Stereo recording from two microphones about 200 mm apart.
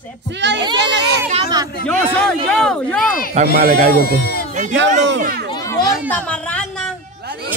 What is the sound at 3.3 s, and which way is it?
Speech, 45° right (ahead or behind).